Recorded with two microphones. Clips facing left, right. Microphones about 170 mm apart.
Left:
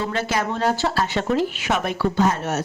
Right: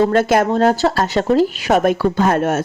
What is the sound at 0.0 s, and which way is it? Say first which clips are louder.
Speech: right 10 dB; 50° right (ahead or behind).